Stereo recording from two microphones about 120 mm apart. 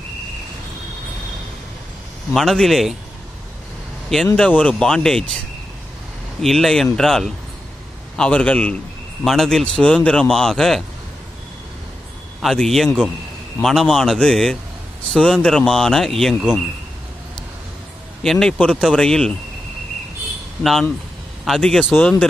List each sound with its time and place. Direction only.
2.3 s speech: centre (ahead or behind)
4.4 s speech: 10° left (ahead or behind)
6.4 s speech: centre (ahead or behind)
12.4 s speech: centre (ahead or behind)
18.2 s speech: 5° left (ahead or behind)
21.5 s speech: 5° left (ahead or behind)